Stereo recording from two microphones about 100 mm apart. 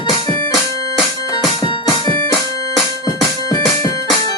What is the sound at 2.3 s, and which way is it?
Music, centre (ahead or behind).